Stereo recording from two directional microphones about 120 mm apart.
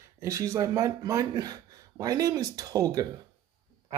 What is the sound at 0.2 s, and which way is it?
Speech, 25° right (ahead or behind).